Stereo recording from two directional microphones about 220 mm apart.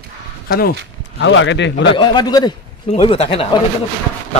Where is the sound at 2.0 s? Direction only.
20° left (ahead or behind).